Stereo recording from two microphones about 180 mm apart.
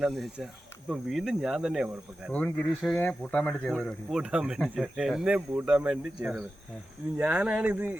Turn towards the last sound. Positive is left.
turn(degrees=-10)  # may be behind; listen again after turning